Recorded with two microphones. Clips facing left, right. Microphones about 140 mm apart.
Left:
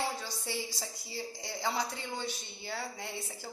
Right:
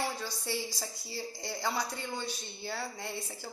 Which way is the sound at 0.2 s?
20° left (ahead or behind).